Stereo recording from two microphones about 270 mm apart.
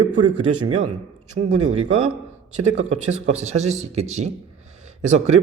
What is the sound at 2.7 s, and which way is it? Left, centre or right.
A man's voice, right.